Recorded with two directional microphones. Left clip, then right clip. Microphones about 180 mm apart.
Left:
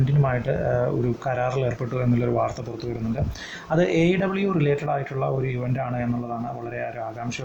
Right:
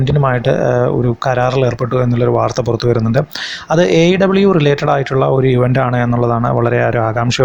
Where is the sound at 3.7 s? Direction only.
25° right (ahead or behind).